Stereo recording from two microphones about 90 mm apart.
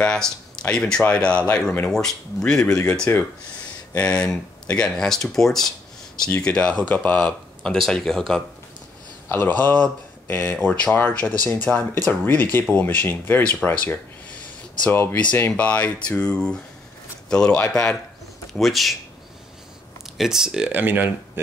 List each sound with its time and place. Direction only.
0.0 s speech: 10° left (ahead or behind)
3.1 s speech: 30° left (ahead or behind)
3.9 s speech: 10° left (ahead or behind)
9.3 s speech: 20° left (ahead or behind)
13.6 s speech: 5° left (ahead or behind)
14.9 s speech: 25° left (ahead or behind); by 18.9 s centre (ahead or behind)
20.2 s speech: 5° right (ahead or behind)
20.7 s speech: 20° right (ahead or behind)